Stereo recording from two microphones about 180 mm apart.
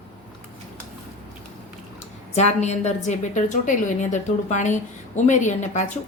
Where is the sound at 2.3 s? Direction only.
40° left (ahead or behind).